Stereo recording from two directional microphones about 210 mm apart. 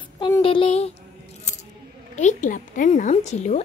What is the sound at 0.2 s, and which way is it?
Speech, 25° left (ahead or behind).